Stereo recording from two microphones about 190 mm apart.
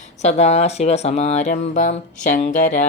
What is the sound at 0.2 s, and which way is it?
Speech, 35° left (ahead or behind).